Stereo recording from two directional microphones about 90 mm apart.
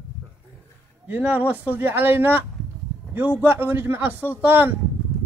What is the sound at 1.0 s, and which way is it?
A man's voice, 20° right (ahead or behind).